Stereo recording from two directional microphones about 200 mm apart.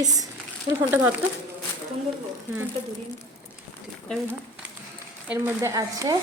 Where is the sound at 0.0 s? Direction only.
20° right (ahead or behind).